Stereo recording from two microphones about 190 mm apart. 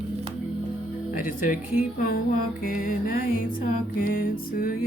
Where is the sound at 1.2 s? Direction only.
45° left (ahead or behind).